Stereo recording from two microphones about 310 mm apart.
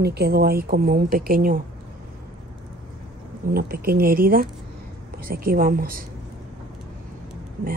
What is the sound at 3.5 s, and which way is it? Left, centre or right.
Speech, right.